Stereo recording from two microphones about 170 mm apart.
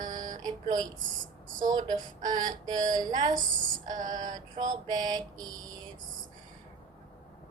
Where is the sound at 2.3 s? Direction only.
25° right (ahead or behind).